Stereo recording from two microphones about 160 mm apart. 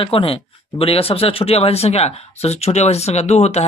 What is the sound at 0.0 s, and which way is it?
Speech, 35° left (ahead or behind).